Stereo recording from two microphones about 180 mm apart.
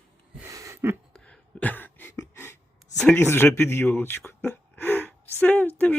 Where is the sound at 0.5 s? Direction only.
15° right (ahead or behind).